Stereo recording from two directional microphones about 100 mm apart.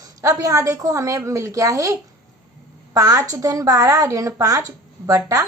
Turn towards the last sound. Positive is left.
turn(degrees=-35)  # may be behind; listen again after turning